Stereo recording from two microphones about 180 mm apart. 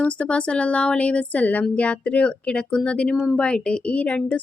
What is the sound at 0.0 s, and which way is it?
A woman's voice, 5° left (ahead or behind).